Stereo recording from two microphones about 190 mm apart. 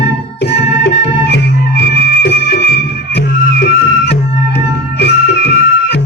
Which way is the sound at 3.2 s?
65° left (ahead or behind).